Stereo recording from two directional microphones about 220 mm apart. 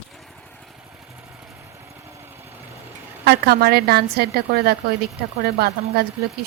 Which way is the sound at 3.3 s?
45° right (ahead or behind).